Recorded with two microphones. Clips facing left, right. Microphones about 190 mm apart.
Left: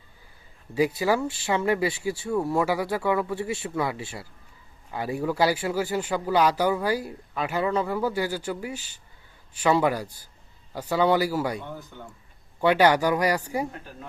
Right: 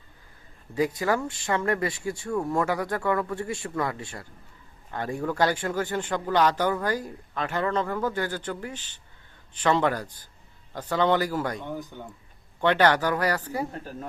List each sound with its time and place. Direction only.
0.7 s speech: 10° left (ahead or behind)
11.7 s speech: 15° right (ahead or behind)
12.5 s speech: 10° left (ahead or behind)